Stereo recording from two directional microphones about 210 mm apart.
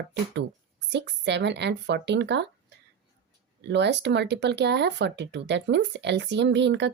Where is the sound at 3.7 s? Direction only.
55° right (ahead or behind).